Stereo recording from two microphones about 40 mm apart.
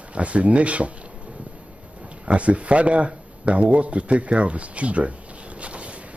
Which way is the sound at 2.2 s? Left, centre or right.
Right.